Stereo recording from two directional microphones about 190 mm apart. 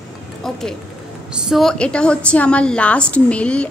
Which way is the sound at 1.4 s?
Centre (ahead or behind).